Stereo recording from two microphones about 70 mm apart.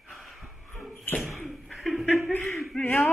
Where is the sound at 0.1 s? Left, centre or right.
Centre.